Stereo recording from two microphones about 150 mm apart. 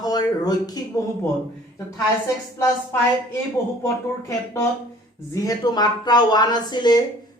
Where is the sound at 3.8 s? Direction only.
20° left (ahead or behind).